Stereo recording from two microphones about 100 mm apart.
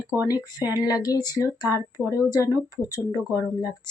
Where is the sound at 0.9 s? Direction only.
40° left (ahead or behind).